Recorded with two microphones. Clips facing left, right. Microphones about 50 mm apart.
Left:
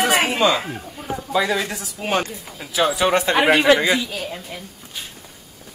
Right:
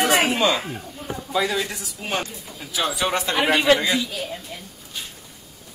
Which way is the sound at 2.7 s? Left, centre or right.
Centre.